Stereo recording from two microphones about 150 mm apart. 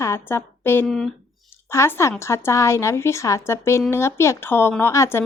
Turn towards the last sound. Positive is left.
turn(degrees=15)  # may be behind; listen again after turning